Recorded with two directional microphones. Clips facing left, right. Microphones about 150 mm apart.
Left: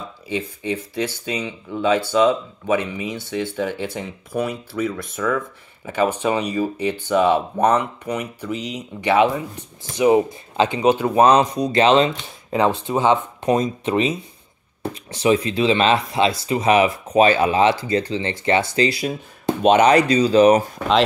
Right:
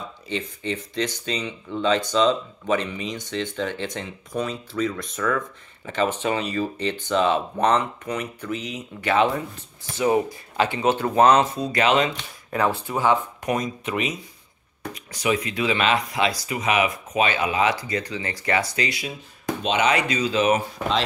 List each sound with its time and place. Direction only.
0.3 s speech: 10° left (ahead or behind); by 19.5 s 35° left (ahead or behind)
19.6 s speech: 45° left (ahead or behind)